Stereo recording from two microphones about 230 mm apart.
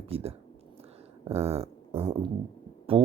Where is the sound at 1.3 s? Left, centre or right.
Right.